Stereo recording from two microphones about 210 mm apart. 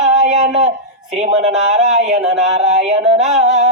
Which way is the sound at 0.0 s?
35° right (ahead or behind).